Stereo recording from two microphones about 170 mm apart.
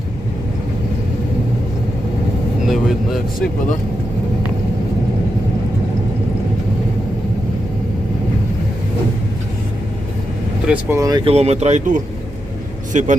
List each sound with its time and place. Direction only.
2.6 s a sound: centre (ahead or behind)
10.7 s speech: 15° right (ahead or behind)
11.3 s a man's voice: 40° right (ahead or behind)